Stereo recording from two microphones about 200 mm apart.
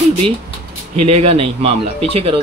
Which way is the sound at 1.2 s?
30° right (ahead or behind).